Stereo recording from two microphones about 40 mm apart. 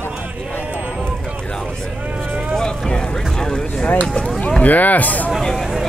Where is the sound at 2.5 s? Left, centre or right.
Centre.